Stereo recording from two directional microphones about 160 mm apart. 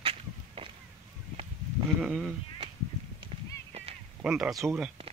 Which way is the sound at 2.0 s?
Centre (ahead or behind).